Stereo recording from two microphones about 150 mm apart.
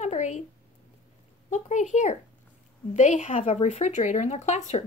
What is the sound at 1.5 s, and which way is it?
Speech, 55° left (ahead or behind).